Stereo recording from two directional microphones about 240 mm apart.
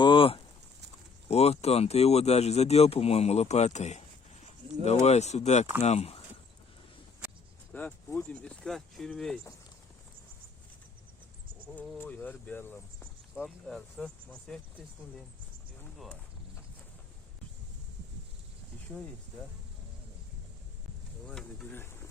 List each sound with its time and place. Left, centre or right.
0.0 s a sound: left
1.3 s speech: left
7.7 s speech: centre
11.7 s speech: centre
21.2 s speech: centre